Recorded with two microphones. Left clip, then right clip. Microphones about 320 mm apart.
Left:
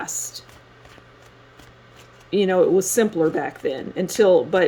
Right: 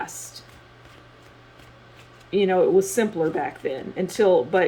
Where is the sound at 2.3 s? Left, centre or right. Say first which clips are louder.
Left 1 dB; left.